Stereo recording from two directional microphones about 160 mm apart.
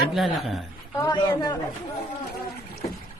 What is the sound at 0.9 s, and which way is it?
Speech, 20° left (ahead or behind).